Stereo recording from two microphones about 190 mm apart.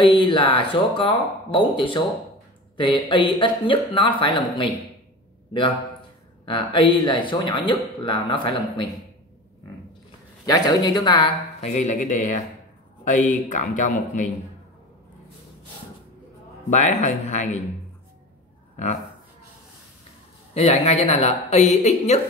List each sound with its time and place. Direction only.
0.0 s speech: 25° left (ahead or behind)
6.4 s speech: 25° left (ahead or behind)
10.4 s speech: 20° left (ahead or behind)
11.7 s speech: 40° left (ahead or behind)
16.7 s speech: 40° left (ahead or behind)
20.5 s speech: 35° left (ahead or behind)